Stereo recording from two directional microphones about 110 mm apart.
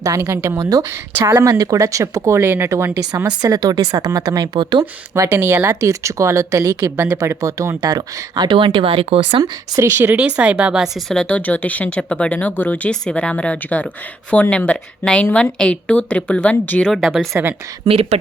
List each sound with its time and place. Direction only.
0.0 s speech: 25° right (ahead or behind)
3.2 s speech: 35° right (ahead or behind)
5.1 s speech: 25° right (ahead or behind); by 9.4 s 60° right (ahead or behind)
9.4 s speech: 30° right (ahead or behind)
10.2 s speech: 10° right (ahead or behind)
11.1 s speech: 10° left (ahead or behind)
17.8 s speech: 60° right (ahead or behind)